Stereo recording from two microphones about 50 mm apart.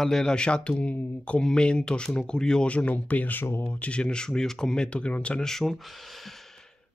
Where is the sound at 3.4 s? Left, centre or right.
Left.